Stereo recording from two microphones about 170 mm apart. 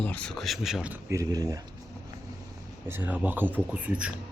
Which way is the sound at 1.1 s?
20° right (ahead or behind).